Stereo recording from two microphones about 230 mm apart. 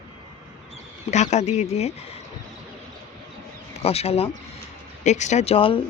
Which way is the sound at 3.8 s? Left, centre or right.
Left.